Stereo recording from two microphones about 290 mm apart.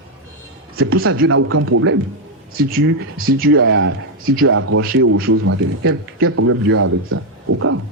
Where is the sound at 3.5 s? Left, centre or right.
Right.